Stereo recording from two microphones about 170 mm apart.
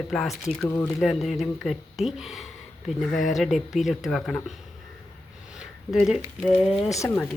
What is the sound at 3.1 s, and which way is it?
Speech, 45° left (ahead or behind).